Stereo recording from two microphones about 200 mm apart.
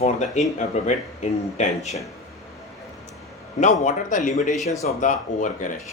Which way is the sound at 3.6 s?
35° left (ahead or behind).